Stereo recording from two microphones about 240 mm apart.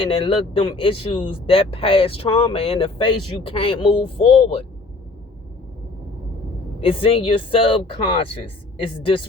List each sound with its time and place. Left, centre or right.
0.0 s speech: left
6.8 s speech: left